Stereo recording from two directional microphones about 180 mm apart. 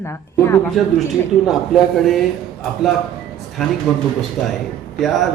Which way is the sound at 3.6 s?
Centre (ahead or behind).